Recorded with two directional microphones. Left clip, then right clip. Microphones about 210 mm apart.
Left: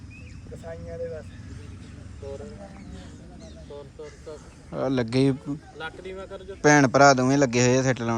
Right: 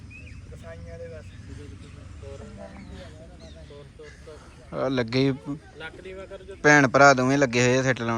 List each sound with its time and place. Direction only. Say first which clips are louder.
0.6 s speech: left 6 dB; 50° left (ahead or behind)
4.7 s speech: even; 10° left (ahead or behind)